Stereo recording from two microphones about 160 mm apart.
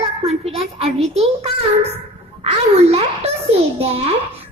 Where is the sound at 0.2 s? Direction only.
40° right (ahead or behind).